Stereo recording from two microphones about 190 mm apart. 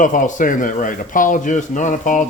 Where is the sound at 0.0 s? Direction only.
40° left (ahead or behind).